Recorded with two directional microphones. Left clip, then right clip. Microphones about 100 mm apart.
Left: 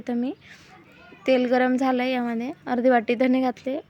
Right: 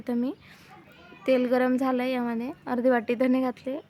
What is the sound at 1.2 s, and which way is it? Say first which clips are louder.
A woman's voice: left 3 dB; 15° left (ahead or behind).